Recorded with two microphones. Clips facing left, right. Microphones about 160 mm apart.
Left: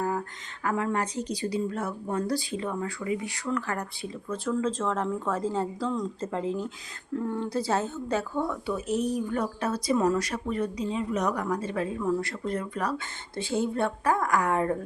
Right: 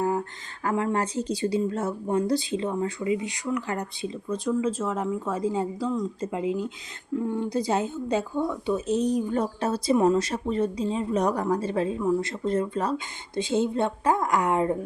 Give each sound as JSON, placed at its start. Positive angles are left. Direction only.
{"t": 0.0, "sound": "speech", "side_deg": -25}